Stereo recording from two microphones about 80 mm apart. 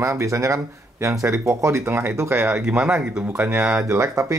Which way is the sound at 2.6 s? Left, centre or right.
Centre.